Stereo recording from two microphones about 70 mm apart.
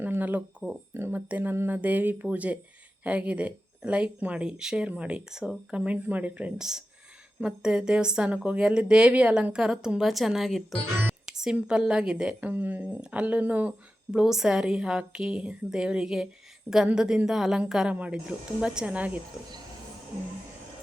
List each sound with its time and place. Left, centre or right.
0.0 s a sound: right
0.9 s speech: right
1.3 s a woman's voice: right
6.6 s a woman's voice: centre
11.3 s a sound: centre
11.7 s a woman's voice: centre
12.4 s speech: right
13.0 s speech: centre
14.1 s a woman's voice: centre